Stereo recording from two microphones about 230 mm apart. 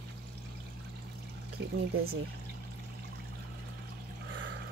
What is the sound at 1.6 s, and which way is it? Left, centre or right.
Speech, right.